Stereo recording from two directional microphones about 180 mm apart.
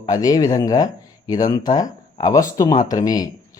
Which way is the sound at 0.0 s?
20° left (ahead or behind).